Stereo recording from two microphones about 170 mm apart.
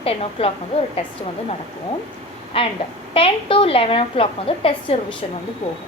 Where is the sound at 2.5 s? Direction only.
35° left (ahead or behind).